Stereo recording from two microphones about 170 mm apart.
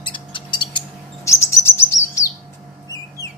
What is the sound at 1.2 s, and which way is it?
Chirp, 15° left (ahead or behind).